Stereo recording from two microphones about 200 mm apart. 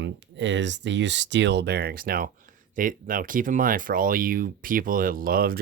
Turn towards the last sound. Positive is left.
turn(degrees=-45)  # may be behind; listen again after turning